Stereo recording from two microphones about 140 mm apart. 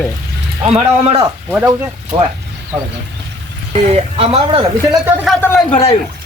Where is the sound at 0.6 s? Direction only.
45° right (ahead or behind).